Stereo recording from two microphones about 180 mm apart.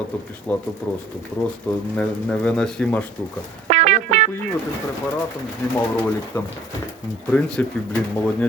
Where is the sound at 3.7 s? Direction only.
40° right (ahead or behind).